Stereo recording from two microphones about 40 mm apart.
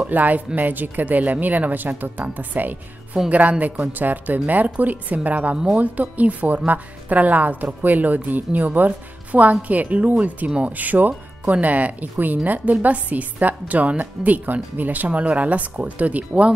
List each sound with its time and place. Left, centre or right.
0.0 s speech: right
3.3 s a woman's voice: right
11.4 s a woman's voice: right